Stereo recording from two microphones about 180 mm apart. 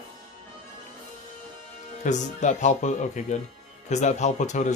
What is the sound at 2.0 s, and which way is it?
Speech, 40° left (ahead or behind).